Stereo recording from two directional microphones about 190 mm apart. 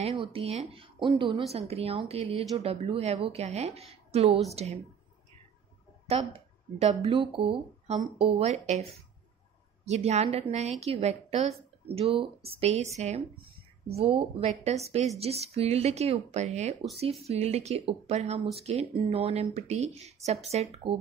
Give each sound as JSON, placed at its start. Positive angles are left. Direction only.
{"t": 0.0, "sound": "speech", "side_deg": -30}
{"t": 6.0, "sound": "speech", "side_deg": -30}